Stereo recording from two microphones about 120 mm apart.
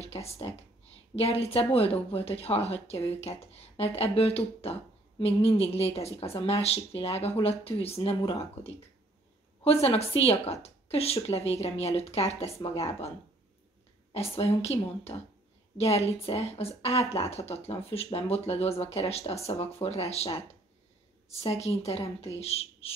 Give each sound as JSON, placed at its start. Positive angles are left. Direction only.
{"t": 0.0, "sound": "speech", "side_deg": 60}
{"t": 14.1, "sound": "speech", "side_deg": 55}
{"t": 21.3, "sound": "speech", "side_deg": 60}